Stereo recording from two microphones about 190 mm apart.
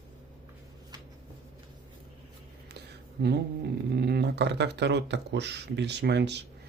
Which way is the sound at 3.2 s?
60° right (ahead or behind).